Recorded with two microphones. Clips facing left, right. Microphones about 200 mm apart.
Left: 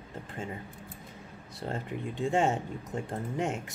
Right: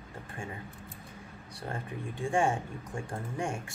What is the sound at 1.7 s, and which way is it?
Speech, 20° left (ahead or behind).